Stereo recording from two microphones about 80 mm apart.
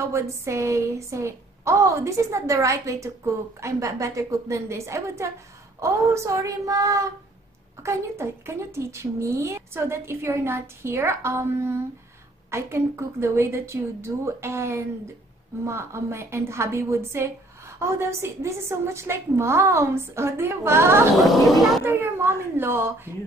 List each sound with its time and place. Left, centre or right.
0.1 s a woman's voice: right
5.8 s child singing: right
7.8 s a woman's voice: right
21.2 s speech: centre
21.8 s speech: right